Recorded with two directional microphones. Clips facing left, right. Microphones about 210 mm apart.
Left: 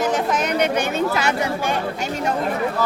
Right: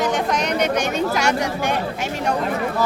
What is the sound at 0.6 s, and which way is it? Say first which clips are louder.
Speech: even; 55° left (ahead or behind).